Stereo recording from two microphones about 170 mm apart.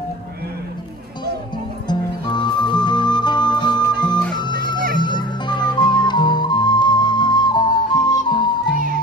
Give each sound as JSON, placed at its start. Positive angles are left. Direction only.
{"t": 1.9, "sound": "music", "side_deg": 25}